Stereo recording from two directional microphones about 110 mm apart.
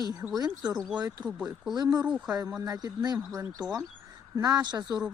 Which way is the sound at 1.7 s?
35° right (ahead or behind).